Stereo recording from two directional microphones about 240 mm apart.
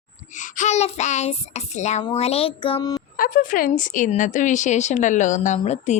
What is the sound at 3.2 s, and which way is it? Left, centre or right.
Speech, left.